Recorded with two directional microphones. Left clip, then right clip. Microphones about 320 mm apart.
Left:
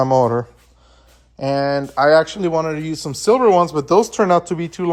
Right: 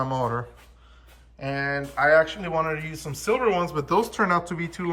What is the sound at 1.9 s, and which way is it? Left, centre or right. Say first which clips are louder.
Speech: left 5 dB; centre.